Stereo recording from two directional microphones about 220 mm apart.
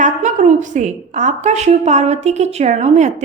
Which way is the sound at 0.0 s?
35° right (ahead or behind).